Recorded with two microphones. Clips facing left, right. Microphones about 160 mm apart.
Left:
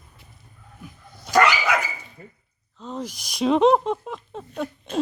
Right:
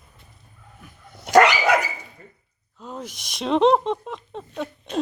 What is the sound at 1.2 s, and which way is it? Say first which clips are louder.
Dog: right 4 dB; 75° right (ahead or behind).